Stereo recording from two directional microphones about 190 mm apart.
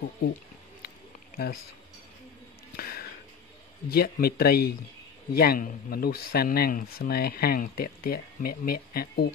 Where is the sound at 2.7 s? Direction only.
50° left (ahead or behind).